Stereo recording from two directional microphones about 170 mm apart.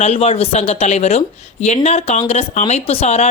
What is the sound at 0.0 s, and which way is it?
Speech, 40° left (ahead or behind).